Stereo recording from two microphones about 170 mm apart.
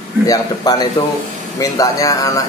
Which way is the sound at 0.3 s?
20° left (ahead or behind).